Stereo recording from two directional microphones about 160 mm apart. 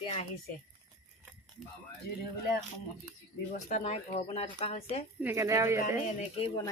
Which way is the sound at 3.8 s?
40° left (ahead or behind).